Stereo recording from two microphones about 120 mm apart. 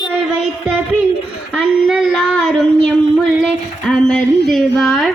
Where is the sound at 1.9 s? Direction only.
Centre (ahead or behind).